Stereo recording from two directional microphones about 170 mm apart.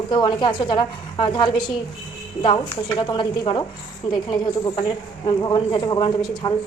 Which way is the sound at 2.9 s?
30° left (ahead or behind).